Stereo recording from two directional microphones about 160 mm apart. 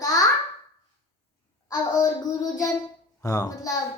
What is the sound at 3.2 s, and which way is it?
Speech, 20° left (ahead or behind).